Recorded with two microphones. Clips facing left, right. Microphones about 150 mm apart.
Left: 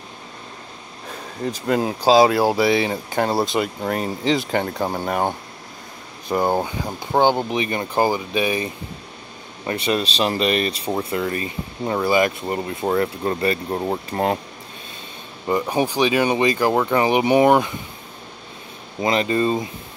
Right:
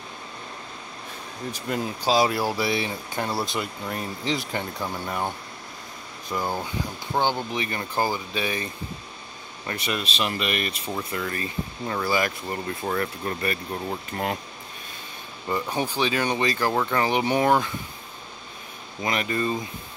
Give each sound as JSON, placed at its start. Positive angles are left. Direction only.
{"t": 1.7, "sound": "speech", "side_deg": 90}
{"t": 3.8, "sound": "speech", "side_deg": 85}
{"t": 4.8, "sound": "speech", "side_deg": 50}
{"t": 6.2, "sound": "speech", "side_deg": 50}
{"t": 7.5, "sound": "speech", "side_deg": 20}
{"t": 9.7, "sound": "speech", "side_deg": 30}
{"t": 13.7, "sound": "speech", "side_deg": 40}
{"t": 15.7, "sound": "speech", "side_deg": 15}
{"t": 19.0, "sound": "speech", "side_deg": 25}